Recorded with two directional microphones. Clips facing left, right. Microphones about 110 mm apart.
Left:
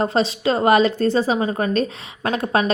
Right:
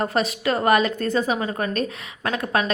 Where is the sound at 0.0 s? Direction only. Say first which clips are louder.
Left 3 dB; 25° left (ahead or behind).